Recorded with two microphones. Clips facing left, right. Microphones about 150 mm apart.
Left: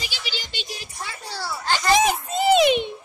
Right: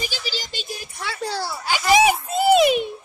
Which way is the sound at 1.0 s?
85° right.